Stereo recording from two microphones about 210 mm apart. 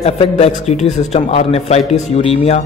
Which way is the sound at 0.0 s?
30° left (ahead or behind).